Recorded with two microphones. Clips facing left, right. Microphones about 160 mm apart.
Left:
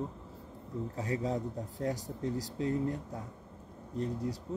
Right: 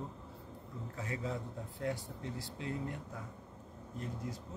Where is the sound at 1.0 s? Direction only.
35° left (ahead or behind).